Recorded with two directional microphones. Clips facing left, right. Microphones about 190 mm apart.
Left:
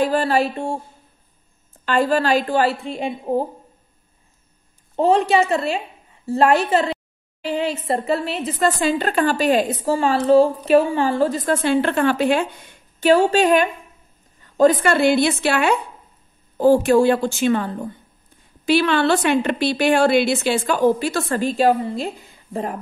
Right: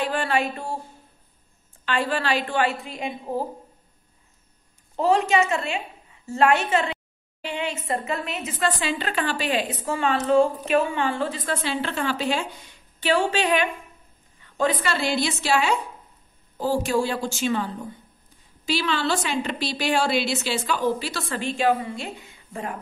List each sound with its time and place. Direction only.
0.0 s speech: 40° left (ahead or behind)
1.9 s a woman's voice: 40° left (ahead or behind)
4.9 s a woman's voice: 30° left (ahead or behind)